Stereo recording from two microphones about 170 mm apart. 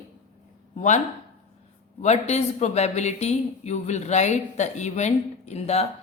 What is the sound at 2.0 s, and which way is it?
Speech, 40° left (ahead or behind).